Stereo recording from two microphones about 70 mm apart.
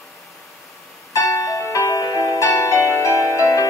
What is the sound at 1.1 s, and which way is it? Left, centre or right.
Music, left.